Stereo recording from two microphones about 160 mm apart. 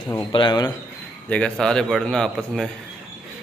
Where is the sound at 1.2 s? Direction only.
5° left (ahead or behind).